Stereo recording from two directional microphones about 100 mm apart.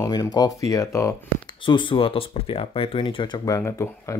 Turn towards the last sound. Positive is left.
turn(degrees=30)  # may be behind; listen again after turning